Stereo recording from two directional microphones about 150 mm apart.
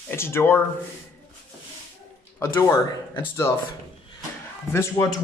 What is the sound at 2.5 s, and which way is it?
Speech, 15° left (ahead or behind).